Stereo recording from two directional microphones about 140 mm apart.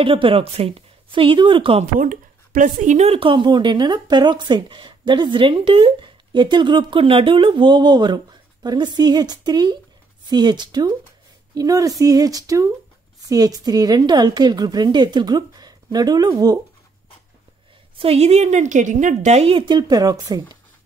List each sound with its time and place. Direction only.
0.0 s speech: 40° right (ahead or behind)
2.0 s a woman's voice: 75° right (ahead or behind); by 16.5 s 30° right (ahead or behind)
17.9 s a woman's voice: 45° right (ahead or behind); by 20.4 s 25° right (ahead or behind)